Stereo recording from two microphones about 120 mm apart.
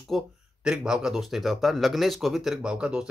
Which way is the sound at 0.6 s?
5° right (ahead or behind).